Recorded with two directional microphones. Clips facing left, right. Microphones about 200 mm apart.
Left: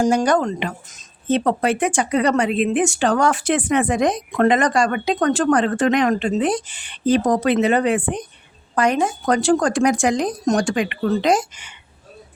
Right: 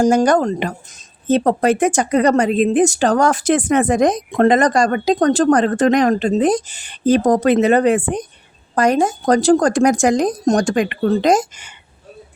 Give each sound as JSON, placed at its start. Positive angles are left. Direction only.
{"t": 0.0, "sound": "speech", "side_deg": -40}